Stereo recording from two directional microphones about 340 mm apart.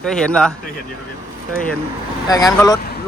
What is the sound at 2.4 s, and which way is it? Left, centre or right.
Speech, centre.